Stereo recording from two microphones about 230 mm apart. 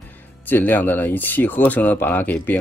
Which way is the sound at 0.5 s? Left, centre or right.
Centre.